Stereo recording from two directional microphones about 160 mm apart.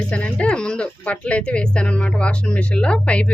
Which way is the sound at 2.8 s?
5° left (ahead or behind).